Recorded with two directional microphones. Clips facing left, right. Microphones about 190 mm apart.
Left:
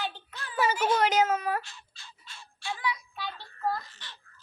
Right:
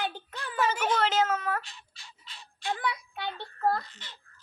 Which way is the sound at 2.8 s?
60° right (ahead or behind).